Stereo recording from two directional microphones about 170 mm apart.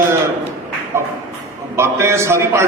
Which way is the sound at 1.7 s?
15° right (ahead or behind).